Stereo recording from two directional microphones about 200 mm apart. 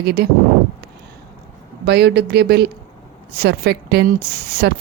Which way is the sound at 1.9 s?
55° right (ahead or behind).